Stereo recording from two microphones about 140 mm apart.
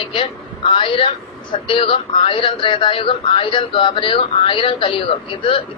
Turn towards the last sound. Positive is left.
turn(degrees=40)  # may be behind; listen again after turning